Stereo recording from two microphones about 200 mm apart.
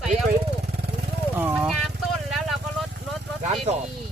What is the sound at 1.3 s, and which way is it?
Vehicle, 10° right (ahead or behind).